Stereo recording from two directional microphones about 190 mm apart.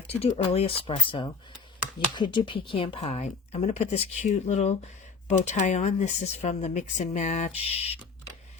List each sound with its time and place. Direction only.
0.2 s speech: 30° left (ahead or behind)